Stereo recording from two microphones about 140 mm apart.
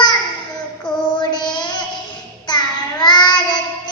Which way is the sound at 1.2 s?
30° left (ahead or behind).